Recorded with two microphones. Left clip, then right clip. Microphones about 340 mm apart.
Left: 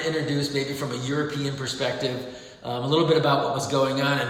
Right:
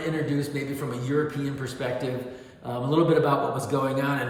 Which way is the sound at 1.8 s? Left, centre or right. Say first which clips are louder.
Left 2 dB; centre.